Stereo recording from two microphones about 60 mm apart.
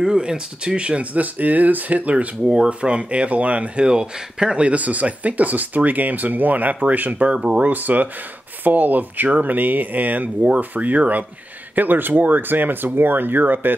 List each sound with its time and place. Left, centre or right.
0.0 s speech: centre
2.4 s speech: centre; by 13.7 s right